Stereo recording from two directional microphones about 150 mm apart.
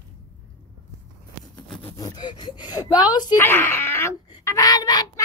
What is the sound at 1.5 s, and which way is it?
Sawing, 10° left (ahead or behind).